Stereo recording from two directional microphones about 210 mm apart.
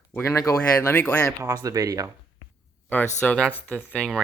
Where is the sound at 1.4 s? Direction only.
15° right (ahead or behind).